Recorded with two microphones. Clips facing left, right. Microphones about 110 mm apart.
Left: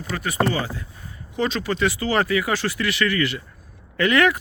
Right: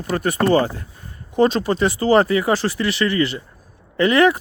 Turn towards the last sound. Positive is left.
turn(degrees=-30)  # may be behind; listen again after turning